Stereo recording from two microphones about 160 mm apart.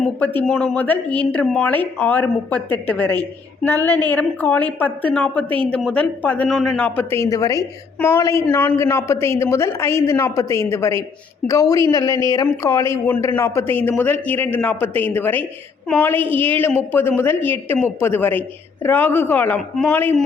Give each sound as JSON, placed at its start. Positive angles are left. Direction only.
{"t": 0.0, "sound": "a woman's voice", "side_deg": 10}